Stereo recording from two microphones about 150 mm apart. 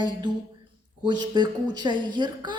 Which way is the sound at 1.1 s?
30° right (ahead or behind).